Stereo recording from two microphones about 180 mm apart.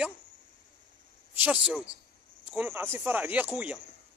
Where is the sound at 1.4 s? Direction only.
5° right (ahead or behind).